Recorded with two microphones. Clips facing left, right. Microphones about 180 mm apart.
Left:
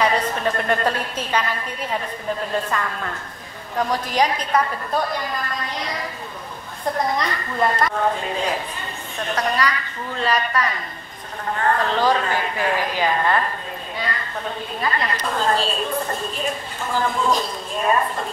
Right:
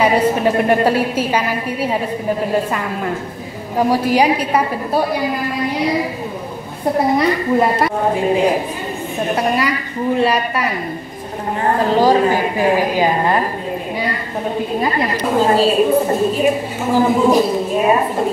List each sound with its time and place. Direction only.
0.0 s a woman's voice: 10° right (ahead or behind)
11.6 s a woman's voice: 25° right (ahead or behind)
14.8 s a woman's voice: 15° right (ahead or behind)
16.9 s a woman's voice: 10° right (ahead or behind)